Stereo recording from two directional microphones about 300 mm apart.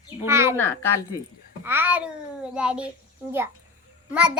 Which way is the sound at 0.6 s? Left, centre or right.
Centre.